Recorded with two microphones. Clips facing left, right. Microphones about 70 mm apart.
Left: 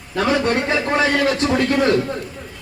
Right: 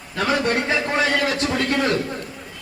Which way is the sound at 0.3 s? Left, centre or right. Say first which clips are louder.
Left 2 dB; left.